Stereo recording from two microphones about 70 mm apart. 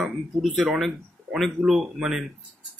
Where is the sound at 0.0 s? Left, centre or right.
Centre.